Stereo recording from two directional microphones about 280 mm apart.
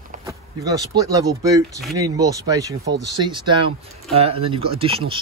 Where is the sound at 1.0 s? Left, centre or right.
Centre.